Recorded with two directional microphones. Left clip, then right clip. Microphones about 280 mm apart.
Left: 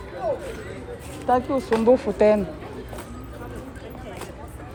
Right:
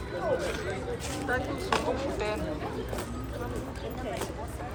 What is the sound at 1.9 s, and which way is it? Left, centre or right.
Speech, left.